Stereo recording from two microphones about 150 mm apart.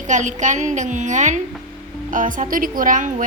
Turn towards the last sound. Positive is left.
turn(degrees=-60)  # may be behind; listen again after turning